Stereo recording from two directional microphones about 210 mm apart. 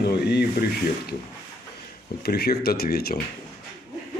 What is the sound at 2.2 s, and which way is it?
Speech, 50° left (ahead or behind).